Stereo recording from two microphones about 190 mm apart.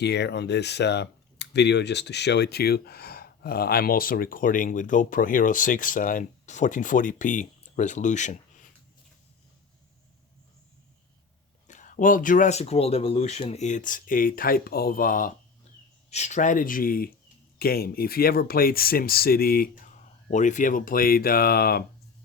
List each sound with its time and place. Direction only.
0.0 s speech: 60° left (ahead or behind); by 8.7 s 40° left (ahead or behind)
11.7 s speech: 45° left (ahead or behind)
16.0 s speech: 35° left (ahead or behind); by 21.8 s 55° left (ahead or behind)